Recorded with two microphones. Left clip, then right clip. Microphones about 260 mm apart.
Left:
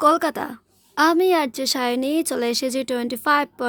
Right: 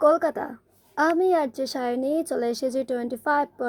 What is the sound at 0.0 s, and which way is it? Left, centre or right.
A woman's voice, left.